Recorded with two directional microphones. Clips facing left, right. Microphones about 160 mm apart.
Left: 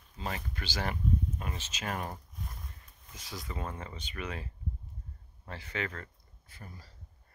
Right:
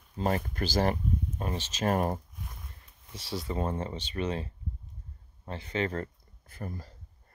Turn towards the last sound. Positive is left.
turn(degrees=-50)  # may be behind; listen again after turning